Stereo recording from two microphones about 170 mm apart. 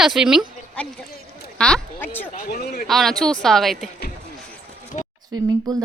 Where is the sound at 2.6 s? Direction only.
60° left (ahead or behind).